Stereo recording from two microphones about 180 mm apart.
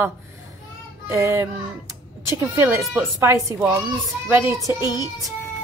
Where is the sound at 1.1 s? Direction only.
15° right (ahead or behind).